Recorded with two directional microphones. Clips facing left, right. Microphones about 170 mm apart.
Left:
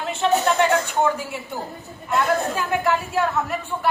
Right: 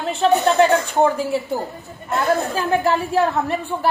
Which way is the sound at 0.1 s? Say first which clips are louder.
Right 3 dB; 35° right (ahead or behind).